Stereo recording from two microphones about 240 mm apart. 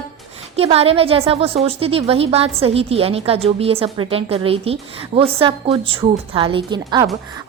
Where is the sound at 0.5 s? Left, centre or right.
Right.